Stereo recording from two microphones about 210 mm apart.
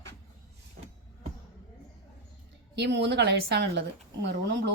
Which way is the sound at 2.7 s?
55° right (ahead or behind).